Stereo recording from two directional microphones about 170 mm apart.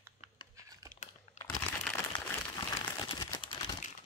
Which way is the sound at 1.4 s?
45° left (ahead or behind).